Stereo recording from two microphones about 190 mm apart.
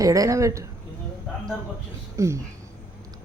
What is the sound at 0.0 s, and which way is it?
Speech, 15° right (ahead or behind).